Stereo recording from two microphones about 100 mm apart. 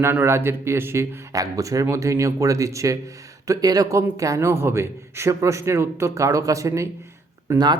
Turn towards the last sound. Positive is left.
turn(degrees=-30)  # may be behind; listen again after turning